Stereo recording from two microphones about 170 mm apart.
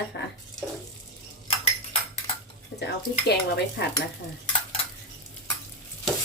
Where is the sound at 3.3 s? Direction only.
80° left.